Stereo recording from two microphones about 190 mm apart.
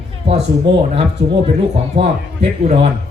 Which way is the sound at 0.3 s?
30° right (ahead or behind).